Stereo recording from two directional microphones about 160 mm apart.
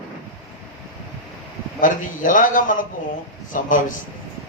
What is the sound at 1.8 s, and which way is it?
A man's voice, 55° left (ahead or behind).